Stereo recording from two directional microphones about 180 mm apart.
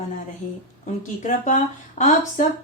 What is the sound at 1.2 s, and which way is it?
Speech, 45° left (ahead or behind).